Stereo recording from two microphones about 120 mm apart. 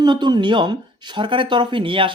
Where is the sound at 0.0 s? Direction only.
40° right (ahead or behind).